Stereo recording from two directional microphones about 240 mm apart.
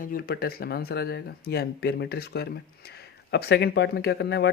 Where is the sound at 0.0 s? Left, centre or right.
Left.